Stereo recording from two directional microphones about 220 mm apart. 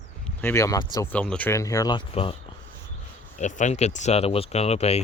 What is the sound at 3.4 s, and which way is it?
Speech, 30° left (ahead or behind).